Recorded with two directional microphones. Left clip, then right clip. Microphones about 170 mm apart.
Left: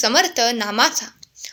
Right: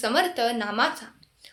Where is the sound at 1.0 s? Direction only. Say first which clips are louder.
Left 11 dB; 45° left (ahead or behind).